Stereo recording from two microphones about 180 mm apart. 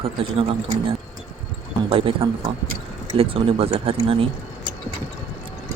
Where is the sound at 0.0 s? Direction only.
30° right (ahead or behind).